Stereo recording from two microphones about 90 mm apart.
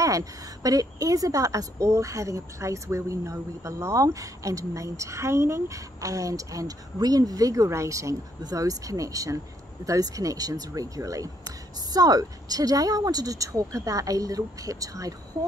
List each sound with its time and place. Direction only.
0.0 s a woman's voice: 40° right (ahead or behind)